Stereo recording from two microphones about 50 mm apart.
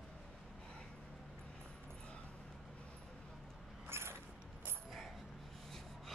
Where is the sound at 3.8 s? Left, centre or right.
Right.